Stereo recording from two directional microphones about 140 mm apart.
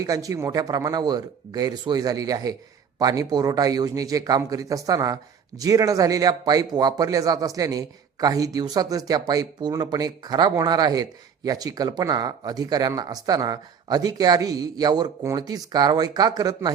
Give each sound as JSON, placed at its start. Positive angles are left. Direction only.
{"t": 0.0, "sound": "a man's voice", "side_deg": -25}